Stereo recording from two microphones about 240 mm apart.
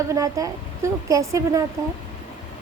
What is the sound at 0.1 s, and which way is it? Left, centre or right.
A woman's voice, centre.